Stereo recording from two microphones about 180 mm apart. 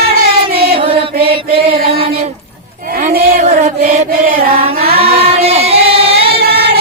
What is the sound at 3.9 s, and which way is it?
Mantra, 55° right (ahead or behind).